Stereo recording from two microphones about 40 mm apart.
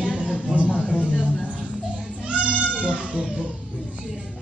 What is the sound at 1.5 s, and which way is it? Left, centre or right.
Music, right.